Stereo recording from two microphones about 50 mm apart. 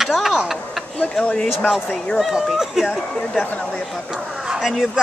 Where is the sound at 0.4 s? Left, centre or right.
Centre.